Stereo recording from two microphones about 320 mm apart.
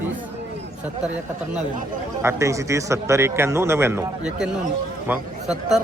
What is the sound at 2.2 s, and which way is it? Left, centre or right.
Speech, centre.